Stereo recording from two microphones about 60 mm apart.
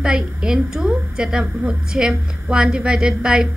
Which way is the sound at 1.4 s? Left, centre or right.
Right.